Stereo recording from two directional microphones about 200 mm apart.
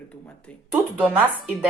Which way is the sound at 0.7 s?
5° right (ahead or behind).